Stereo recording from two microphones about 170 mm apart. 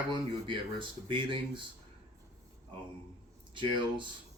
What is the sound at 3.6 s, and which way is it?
Speech, 30° right (ahead or behind).